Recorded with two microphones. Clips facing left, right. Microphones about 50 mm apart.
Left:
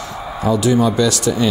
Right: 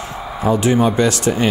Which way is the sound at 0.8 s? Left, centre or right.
Right.